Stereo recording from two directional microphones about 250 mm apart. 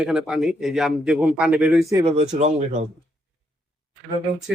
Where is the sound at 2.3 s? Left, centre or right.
Right.